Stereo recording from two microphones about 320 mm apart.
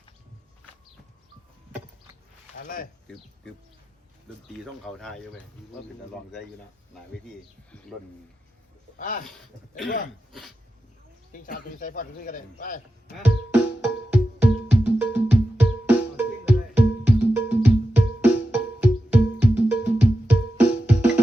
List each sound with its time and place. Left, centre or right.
2.6 s speech: left
4.6 s speech: centre
9.0 s speech: left
11.3 s speech: left
13.2 s music: centre